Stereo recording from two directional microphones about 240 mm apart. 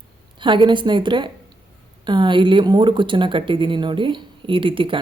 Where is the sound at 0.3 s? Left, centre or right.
Right.